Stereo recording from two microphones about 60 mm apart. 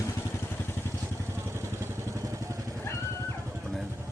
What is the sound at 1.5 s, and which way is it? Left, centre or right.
Vehicle, right.